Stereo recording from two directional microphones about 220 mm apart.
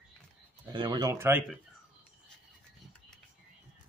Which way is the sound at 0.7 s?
20° right (ahead or behind).